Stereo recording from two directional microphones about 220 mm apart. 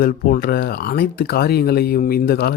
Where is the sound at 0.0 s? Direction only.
40° left (ahead or behind).